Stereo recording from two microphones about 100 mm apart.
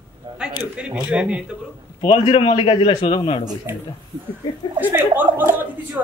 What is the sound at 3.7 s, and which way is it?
A man's voice, 25° right (ahead or behind).